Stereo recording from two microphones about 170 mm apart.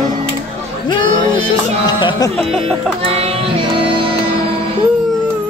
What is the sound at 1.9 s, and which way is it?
Music, 25° left (ahead or behind).